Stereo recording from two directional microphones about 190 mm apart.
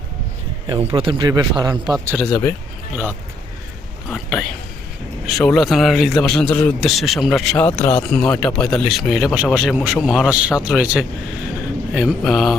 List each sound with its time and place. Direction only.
0.9 s a man's voice: 25° right (ahead or behind)
2.1 s speech: 5° left (ahead or behind)
4.1 s speech: centre (ahead or behind)